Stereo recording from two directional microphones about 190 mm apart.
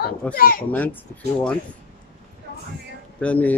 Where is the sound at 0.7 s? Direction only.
10° left (ahead or behind).